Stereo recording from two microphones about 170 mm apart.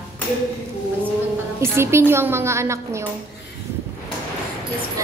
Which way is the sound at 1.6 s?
15° right (ahead or behind).